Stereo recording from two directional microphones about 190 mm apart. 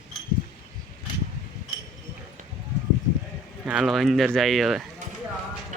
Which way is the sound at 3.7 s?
5° right (ahead or behind).